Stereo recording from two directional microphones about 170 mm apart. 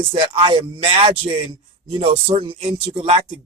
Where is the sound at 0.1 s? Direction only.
30° right (ahead or behind).